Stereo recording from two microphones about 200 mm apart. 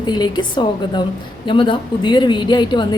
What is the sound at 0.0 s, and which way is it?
A woman's voice, 20° left (ahead or behind).